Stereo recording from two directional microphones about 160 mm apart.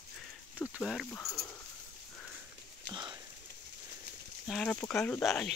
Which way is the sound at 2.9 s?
30° right (ahead or behind).